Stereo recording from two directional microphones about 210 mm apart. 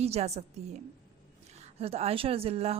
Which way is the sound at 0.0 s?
30° right (ahead or behind).